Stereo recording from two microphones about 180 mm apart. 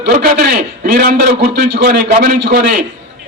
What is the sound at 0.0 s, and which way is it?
A man's voice, 50° right (ahead or behind).